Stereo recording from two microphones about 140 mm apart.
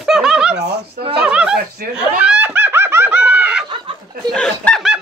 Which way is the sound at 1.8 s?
90° right.